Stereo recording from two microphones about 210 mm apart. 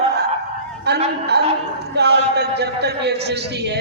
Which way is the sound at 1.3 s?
50° right (ahead or behind).